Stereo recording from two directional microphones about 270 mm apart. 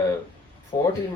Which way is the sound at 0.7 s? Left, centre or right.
Centre.